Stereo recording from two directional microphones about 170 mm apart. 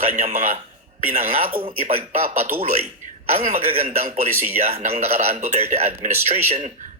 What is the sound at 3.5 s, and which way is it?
Speech, 40° right (ahead or behind).